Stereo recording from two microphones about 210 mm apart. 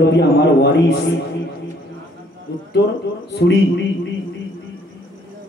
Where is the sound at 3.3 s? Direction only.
50° left (ahead or behind).